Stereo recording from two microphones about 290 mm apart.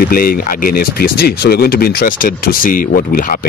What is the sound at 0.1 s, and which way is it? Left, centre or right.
Speech, left.